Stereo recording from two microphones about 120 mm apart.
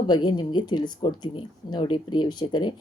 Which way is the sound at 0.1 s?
35° left (ahead or behind).